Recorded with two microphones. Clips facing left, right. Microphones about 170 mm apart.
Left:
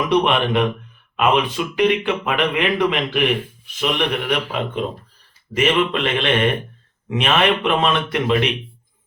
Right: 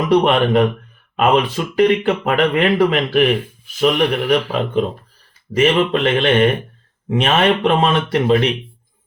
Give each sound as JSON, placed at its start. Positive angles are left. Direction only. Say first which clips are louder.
{"t": 0.1, "sound": "a man's voice", "louder": "right 5 dB", "side_deg": -45}